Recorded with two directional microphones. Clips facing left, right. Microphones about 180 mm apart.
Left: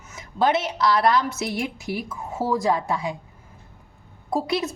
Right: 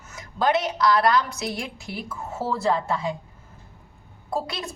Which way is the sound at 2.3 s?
15° left (ahead or behind).